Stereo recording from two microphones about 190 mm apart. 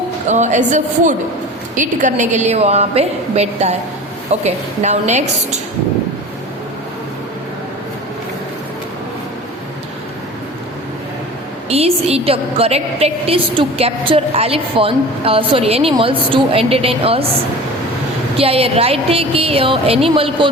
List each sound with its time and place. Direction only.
0.3 s a woman's voice: 40° right (ahead or behind)
11.7 s a woman's voice: 30° right (ahead or behind)
18.3 s a woman's voice: 30° right (ahead or behind)